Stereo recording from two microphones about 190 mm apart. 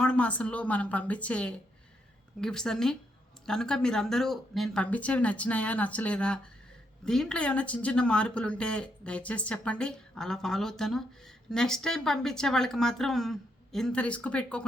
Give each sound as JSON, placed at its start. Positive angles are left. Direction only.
{"t": 0.0, "sound": "a woman's voice", "side_deg": 5}